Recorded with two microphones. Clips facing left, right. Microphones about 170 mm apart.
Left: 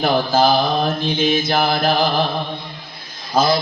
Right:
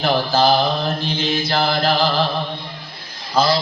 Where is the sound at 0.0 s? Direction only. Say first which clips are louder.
Left 1 dB; 50° left (ahead or behind).